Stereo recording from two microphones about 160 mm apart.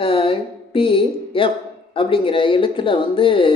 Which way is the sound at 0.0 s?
35° left (ahead or behind).